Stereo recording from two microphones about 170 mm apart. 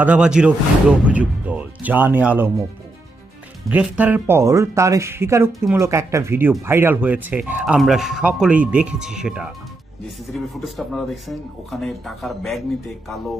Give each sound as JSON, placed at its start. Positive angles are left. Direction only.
{"t": 0.0, "sound": "speech", "side_deg": -5}
{"t": 3.7, "sound": "speech", "side_deg": -10}